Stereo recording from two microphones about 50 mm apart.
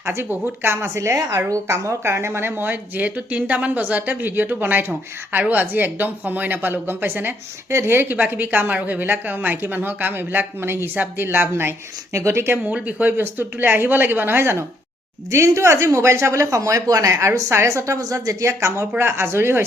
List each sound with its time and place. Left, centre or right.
0.0 s a woman's voice: right
0.3 s speech: right
0.7 s speech: right
7.7 s speech: right
10.9 s a woman's voice: right
12.1 s speech: right
12.7 s speech: right
15.3 s speech: right